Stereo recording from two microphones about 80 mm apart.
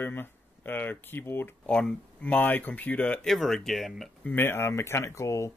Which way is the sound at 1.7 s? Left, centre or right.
Centre.